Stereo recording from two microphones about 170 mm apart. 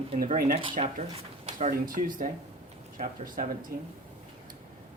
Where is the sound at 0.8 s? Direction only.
40° right (ahead or behind).